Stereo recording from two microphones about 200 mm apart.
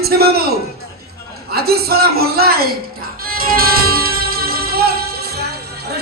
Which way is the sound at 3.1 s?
45° right (ahead or behind).